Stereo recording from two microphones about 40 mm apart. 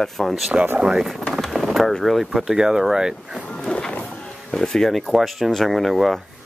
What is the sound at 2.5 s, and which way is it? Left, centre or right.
Speech, centre.